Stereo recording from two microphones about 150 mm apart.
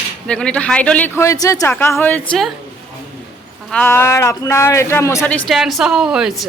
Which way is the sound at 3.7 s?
15° left (ahead or behind).